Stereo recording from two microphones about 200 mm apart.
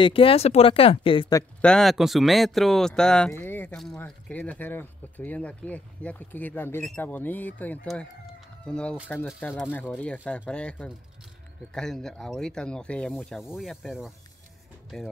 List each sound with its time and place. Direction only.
0.0 s speech: 25° left (ahead or behind)
1.6 s speech: 5° left (ahead or behind)